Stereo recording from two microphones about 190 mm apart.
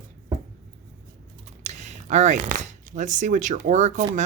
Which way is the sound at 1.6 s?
35° right (ahead or behind).